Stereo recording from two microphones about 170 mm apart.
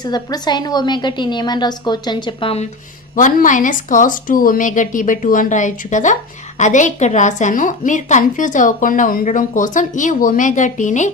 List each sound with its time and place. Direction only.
0.0 s a woman's voice: 25° left (ahead or behind)
3.2 s a woman's voice: 50° left (ahead or behind)